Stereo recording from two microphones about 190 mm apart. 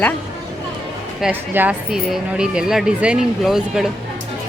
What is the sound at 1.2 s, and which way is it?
A woman's voice, 10° right (ahead or behind).